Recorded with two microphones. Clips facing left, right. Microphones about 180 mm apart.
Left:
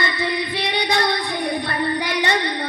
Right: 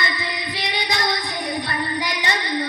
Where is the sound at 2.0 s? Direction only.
60° left (ahead or behind).